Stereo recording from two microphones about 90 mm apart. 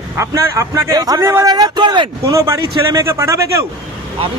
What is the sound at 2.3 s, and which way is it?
A man's voice, 35° right (ahead or behind).